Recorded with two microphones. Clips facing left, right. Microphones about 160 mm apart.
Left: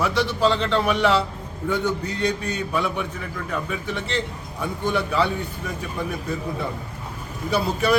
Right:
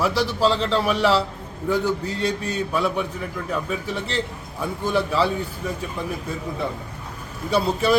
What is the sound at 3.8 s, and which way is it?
Speech, 35° right (ahead or behind).